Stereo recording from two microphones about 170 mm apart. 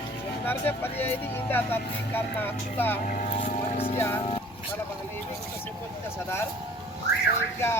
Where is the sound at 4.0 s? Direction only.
15° left (ahead or behind).